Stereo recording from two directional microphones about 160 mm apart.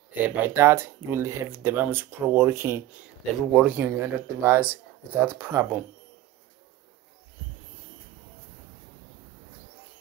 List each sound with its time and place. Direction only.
0.2 s speech: 10° right (ahead or behind)